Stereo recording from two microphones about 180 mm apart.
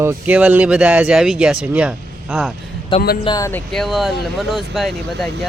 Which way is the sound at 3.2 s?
20° left (ahead or behind).